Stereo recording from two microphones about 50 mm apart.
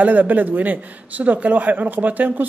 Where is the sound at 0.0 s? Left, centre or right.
Right.